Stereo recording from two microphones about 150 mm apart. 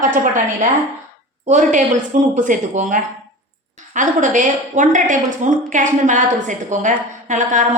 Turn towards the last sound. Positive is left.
turn(degrees=-55)  # may be behind; listen again after turning